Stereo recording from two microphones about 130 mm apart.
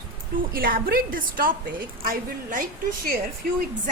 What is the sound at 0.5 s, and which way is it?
A woman's voice, 90° right.